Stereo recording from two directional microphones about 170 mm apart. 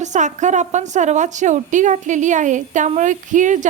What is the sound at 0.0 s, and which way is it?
A woman's voice, 45° right (ahead or behind).